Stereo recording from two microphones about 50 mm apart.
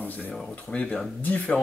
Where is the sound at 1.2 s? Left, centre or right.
Left.